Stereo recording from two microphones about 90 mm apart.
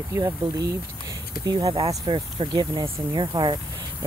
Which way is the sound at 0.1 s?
40° right (ahead or behind).